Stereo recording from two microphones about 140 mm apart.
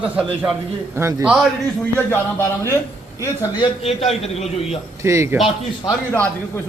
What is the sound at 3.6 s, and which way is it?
A man's voice, 45° left (ahead or behind).